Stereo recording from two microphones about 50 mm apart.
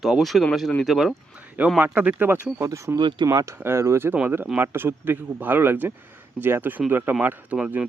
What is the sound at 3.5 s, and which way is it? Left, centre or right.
Speech, right.